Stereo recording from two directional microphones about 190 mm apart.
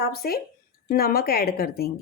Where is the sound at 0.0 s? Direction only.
55° left (ahead or behind).